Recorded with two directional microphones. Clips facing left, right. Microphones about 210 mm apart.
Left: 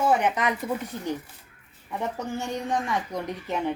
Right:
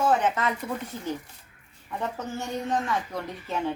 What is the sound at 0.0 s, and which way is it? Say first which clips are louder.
Speech: left 1 dB; 15° left (ahead or behind).